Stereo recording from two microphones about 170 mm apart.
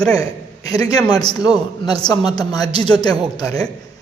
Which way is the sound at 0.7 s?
20° left (ahead or behind).